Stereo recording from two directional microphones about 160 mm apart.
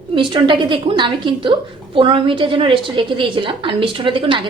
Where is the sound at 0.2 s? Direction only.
30° right (ahead or behind).